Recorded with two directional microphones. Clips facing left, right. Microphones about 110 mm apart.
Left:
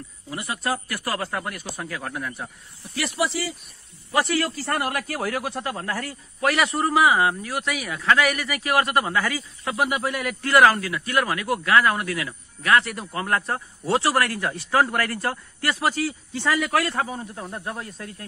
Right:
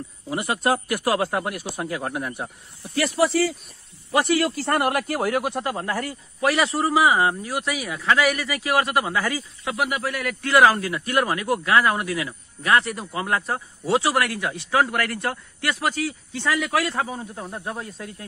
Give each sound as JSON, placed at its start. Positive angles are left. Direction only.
{"t": 0.6, "sound": "a man's voice", "side_deg": -20}
{"t": 3.0, "sound": "speech", "side_deg": -45}
{"t": 4.1, "sound": "a man's voice", "side_deg": -20}
{"t": 6.4, "sound": "speech", "side_deg": 0}
{"t": 8.0, "sound": "speech", "side_deg": -5}
{"t": 9.9, "sound": "speech", "side_deg": 15}
{"t": 11.0, "sound": "a man's voice", "side_deg": -20}